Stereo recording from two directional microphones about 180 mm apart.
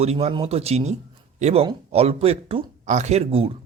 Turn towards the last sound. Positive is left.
turn(degrees=-35)  # may be behind; listen again after turning